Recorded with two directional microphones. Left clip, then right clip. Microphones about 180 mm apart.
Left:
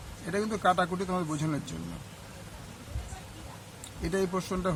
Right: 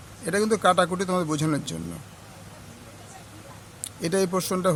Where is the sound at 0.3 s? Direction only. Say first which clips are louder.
Right 6 dB; 55° right (ahead or behind).